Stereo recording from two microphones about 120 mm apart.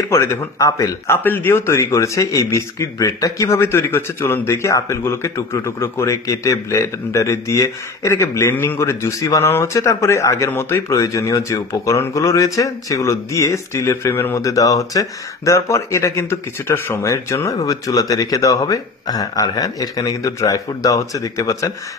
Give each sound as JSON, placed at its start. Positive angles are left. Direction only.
{"t": 0.1, "sound": "a man's voice", "side_deg": 20}